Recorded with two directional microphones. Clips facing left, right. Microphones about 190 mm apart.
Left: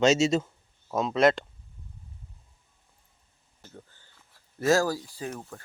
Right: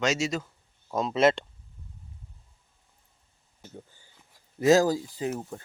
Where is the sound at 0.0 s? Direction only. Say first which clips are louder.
Left 6 dB; 25° left (ahead or behind).